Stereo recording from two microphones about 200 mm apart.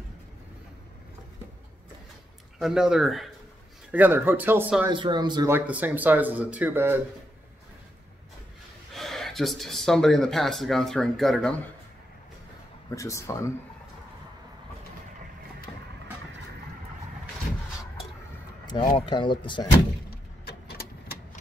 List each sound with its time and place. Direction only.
2.6 s speech: 5° right (ahead or behind)
4.8 s speech: 20° right (ahead or behind)
5.5 s speech: 10° right (ahead or behind)
8.9 s speech: centre (ahead or behind)
12.9 s speech: 15° left (ahead or behind)
18.9 s speech: 25° left (ahead or behind)